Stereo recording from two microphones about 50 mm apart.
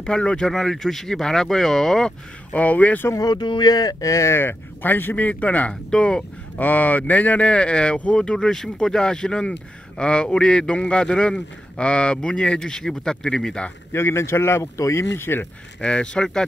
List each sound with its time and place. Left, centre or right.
0.0 s speech: centre
0.5 s speech: centre
2.5 s speech: left
4.0 s speech: left
4.4 s speech: left
5.9 s speech: centre
6.6 s speech: left; by 13.7 s centre
13.9 s a man's voice: left
15.1 s speech: left
15.8 s speech: centre